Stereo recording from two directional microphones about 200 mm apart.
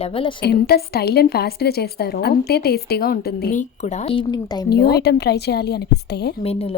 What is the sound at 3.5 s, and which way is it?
Speech, 40° left (ahead or behind).